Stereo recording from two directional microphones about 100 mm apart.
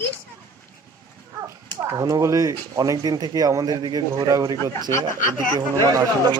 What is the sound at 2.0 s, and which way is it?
Speech, 35° right (ahead or behind).